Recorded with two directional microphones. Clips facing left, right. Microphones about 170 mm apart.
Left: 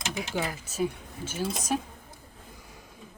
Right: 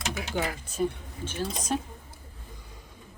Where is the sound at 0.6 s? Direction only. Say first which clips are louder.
Right 1 dB; 5° left (ahead or behind).